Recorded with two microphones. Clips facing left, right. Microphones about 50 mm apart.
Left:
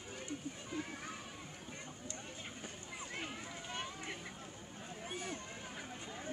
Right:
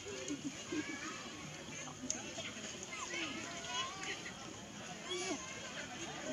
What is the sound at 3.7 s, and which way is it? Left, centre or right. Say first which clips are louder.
Vehicle: right 2 dB; centre.